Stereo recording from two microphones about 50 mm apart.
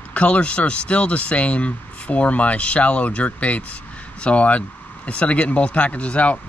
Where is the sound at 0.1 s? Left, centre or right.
Left.